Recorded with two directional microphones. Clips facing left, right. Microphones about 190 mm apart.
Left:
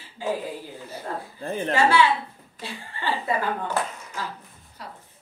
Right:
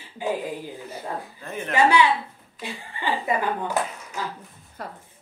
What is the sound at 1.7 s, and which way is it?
A woman's voice, 15° right (ahead or behind).